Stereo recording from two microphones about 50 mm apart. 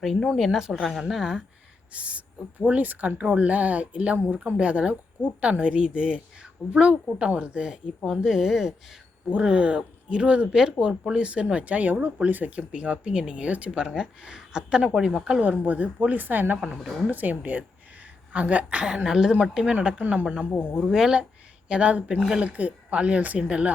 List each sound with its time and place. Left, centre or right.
0.0 s a woman's voice: centre
1.9 s a woman's voice: right; by 9.0 s centre
9.3 s a woman's voice: right
15.4 s a woman's voice: right
19.0 s speech: centre
20.0 s a woman's voice: right
20.7 s a woman's voice: centre